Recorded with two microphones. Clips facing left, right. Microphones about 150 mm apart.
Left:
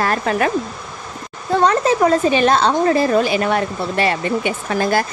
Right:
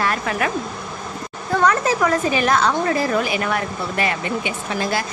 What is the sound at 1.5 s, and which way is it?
A woman's voice, 25° left (ahead or behind).